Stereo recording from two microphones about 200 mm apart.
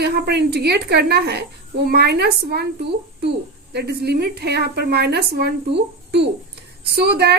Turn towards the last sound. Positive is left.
turn(degrees=-55)  # may be behind; listen again after turning